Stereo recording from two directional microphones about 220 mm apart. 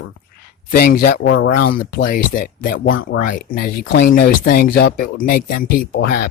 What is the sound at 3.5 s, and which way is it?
Speech, 40° left (ahead or behind).